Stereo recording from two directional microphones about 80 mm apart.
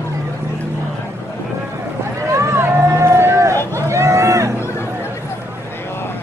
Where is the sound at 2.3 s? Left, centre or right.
Right.